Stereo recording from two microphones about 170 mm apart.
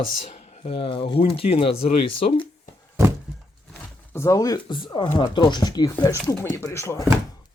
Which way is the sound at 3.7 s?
15° left (ahead or behind).